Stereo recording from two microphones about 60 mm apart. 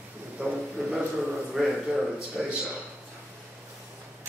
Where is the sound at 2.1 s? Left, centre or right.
Centre.